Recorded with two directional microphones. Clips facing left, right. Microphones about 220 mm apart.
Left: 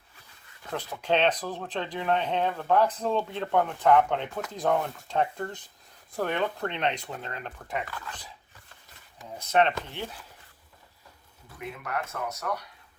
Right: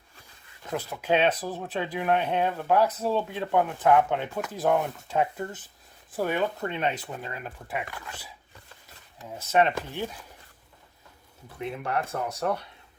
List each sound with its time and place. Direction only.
0.7 s speech: 10° right (ahead or behind)
9.4 s speech: 10° right (ahead or behind)
11.8 s speech: 30° right (ahead or behind)